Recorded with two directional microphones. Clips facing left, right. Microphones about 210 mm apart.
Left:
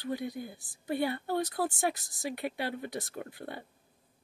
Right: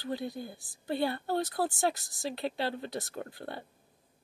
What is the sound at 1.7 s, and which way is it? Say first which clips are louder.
Speech: right 1 dB; 20° left (ahead or behind).